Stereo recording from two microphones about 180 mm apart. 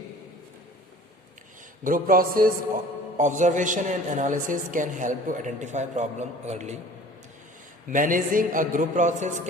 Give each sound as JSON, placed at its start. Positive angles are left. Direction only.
{"t": 1.8, "sound": "a man's voice", "side_deg": -50}
{"t": 7.9, "sound": "a man's voice", "side_deg": -45}